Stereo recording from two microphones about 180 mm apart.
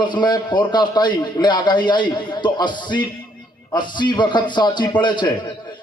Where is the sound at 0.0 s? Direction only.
25° left (ahead or behind).